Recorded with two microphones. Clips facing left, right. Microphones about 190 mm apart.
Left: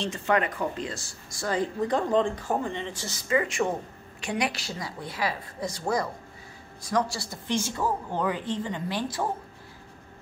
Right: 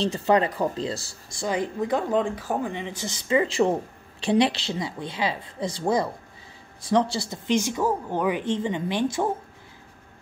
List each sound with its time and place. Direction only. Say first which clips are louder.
0.0 s speech: right 5 dB; 35° right (ahead or behind)
1.4 s speech: right 1 dB; 15° right (ahead or behind)